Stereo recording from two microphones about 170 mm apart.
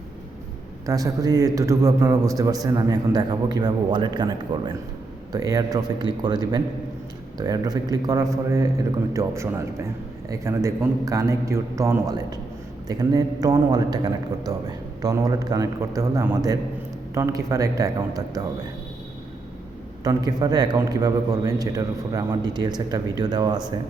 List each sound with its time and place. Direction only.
0.9 s a man's voice: 20° right (ahead or behind)
20.1 s a man's voice: 20° right (ahead or behind)